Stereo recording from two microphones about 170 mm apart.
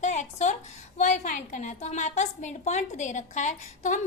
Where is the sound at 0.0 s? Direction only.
45° left (ahead or behind).